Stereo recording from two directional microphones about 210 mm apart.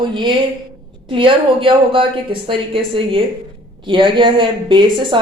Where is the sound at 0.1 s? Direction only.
20° right (ahead or behind).